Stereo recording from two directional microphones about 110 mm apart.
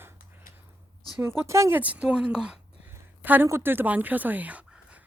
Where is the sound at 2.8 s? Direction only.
15° right (ahead or behind).